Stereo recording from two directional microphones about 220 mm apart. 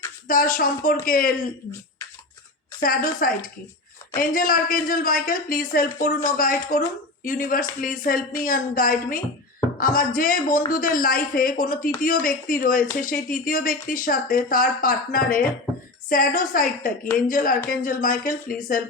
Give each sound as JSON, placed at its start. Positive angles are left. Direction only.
{"t": 0.3, "sound": "speech", "side_deg": 40}
{"t": 2.8, "sound": "speech", "side_deg": 40}